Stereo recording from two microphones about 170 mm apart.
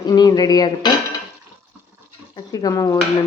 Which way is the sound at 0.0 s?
25° left (ahead or behind).